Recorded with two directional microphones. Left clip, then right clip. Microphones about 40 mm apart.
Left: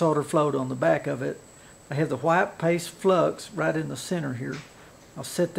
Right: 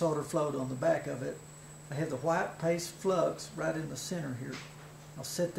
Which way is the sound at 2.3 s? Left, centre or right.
Centre.